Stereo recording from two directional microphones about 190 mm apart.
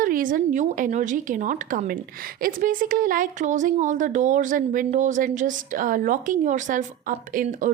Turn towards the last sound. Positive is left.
turn(degrees=-45)  # may be behind; listen again after turning